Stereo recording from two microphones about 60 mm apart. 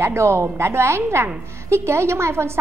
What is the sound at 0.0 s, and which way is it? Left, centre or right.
A woman's voice, right.